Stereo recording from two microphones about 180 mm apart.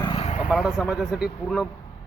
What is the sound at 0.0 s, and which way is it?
Vehicle, 25° left (ahead or behind).